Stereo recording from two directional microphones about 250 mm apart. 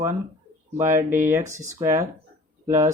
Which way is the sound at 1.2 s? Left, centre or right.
Centre.